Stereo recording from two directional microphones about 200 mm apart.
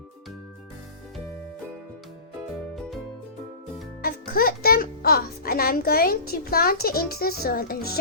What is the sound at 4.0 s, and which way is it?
A child's voice, 50° left (ahead or behind).